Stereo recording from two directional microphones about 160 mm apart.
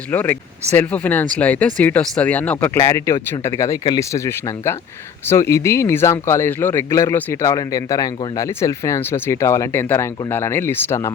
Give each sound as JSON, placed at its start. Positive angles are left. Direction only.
{"t": 0.1, "sound": "speech", "side_deg": 10}